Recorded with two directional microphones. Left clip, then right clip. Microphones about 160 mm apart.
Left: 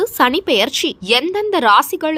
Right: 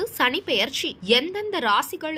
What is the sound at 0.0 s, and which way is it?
A woman's voice, 60° left (ahead or behind).